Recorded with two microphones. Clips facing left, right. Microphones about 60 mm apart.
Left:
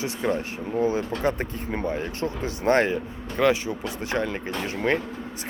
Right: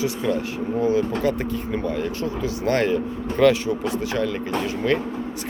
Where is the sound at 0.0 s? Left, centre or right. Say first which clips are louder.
Right 3 dB; left.